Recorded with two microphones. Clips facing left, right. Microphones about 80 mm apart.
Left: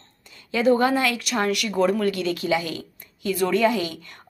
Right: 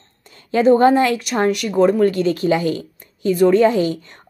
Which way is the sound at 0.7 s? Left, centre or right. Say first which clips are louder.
Right 7 dB; right.